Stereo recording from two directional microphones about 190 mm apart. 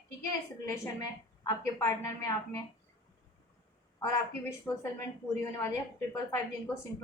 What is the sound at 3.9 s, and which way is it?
A woman's voice, 15° left (ahead or behind).